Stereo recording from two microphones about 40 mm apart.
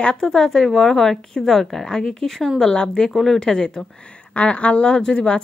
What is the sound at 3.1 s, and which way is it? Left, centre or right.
Speech, centre.